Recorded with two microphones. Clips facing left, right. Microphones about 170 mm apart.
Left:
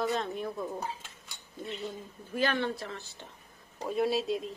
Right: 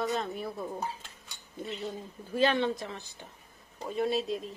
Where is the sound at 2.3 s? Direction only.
25° right (ahead or behind).